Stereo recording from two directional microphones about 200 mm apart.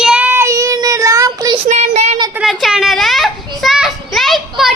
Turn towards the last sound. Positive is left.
turn(degrees=0)  # may be behind; listen again after turning